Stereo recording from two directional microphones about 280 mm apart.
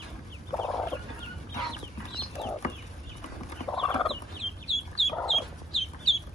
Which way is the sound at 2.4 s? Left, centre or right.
Centre.